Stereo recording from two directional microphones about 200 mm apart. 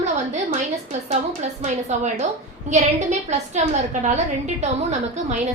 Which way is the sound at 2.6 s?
35° right (ahead or behind).